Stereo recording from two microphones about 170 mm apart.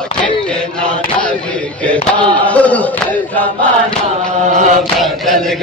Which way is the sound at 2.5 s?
10° left (ahead or behind).